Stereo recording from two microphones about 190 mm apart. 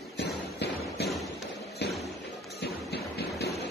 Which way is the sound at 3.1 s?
55° left (ahead or behind).